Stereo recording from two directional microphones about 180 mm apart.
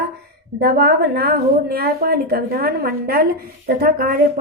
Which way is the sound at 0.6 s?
60° right (ahead or behind).